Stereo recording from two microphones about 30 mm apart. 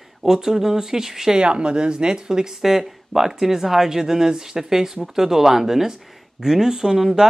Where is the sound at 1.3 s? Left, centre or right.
Right.